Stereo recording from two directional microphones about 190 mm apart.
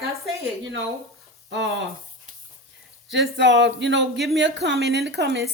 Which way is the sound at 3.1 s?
70° right (ahead or behind).